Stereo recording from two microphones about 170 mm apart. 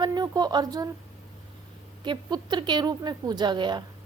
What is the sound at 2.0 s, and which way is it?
A woman's voice, 25° right (ahead or behind).